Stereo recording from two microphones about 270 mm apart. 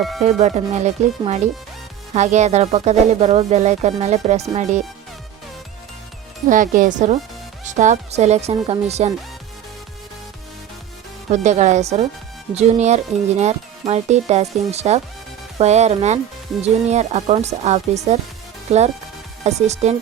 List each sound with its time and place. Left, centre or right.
0.2 s speech: right
6.5 s speech: right
11.3 s speech: right